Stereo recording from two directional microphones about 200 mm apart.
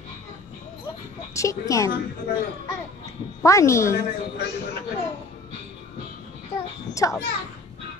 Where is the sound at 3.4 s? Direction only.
15° left (ahead or behind).